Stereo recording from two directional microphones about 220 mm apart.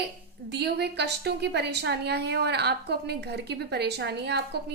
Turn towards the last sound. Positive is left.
turn(degrees=-50)  # may be behind; listen again after turning